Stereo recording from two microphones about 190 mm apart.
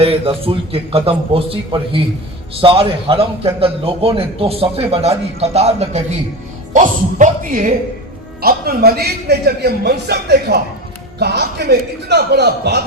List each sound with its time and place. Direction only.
0.0 s a man's voice: 30° right (ahead or behind); by 12.8 s 60° right (ahead or behind)